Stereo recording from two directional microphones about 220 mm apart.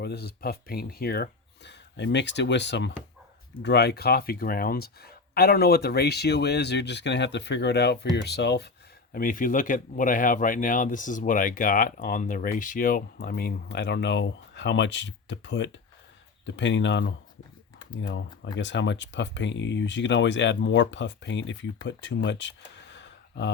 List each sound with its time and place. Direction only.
0.0 s speech: 45° left (ahead or behind)
9.1 s speech: 40° left (ahead or behind); by 23.5 s 55° left (ahead or behind)